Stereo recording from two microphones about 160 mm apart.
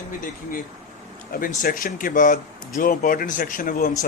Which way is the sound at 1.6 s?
60° left (ahead or behind).